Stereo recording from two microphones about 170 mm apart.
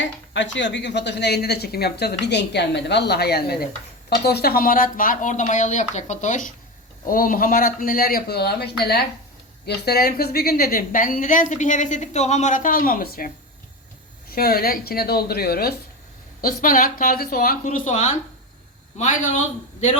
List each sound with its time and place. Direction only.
0.0 s a woman's voice: 90° left; by 19.9 s 50° left (ahead or behind)